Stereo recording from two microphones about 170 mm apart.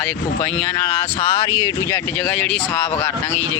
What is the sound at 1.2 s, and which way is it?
Speech, 20° left (ahead or behind).